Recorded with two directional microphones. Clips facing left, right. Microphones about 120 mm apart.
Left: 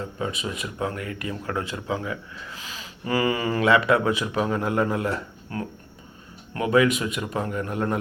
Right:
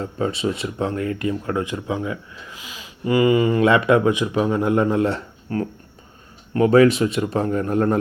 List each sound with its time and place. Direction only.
0.0 s speech: 35° right (ahead or behind)